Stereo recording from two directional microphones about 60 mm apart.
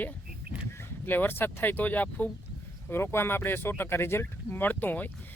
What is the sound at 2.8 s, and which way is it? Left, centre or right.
Speech, left.